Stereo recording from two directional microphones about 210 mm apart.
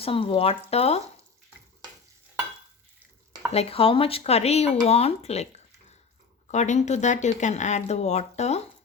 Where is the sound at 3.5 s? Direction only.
30° left (ahead or behind).